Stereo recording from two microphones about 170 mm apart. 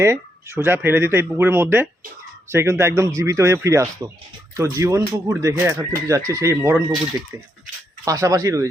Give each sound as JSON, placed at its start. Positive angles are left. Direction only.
{"t": 0.0, "sound": "speech", "side_deg": -15}
{"t": 8.0, "sound": "speech", "side_deg": -20}